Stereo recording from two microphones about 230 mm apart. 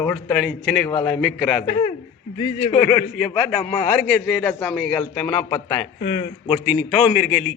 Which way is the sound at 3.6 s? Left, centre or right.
Centre.